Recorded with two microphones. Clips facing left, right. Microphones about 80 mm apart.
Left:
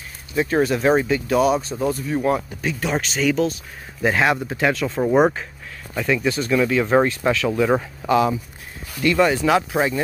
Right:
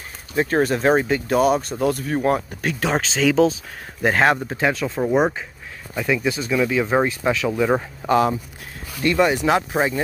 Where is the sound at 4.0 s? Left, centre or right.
Right.